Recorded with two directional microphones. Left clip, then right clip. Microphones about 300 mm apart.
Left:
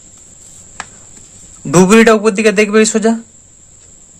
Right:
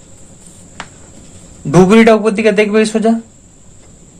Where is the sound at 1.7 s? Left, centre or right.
Left.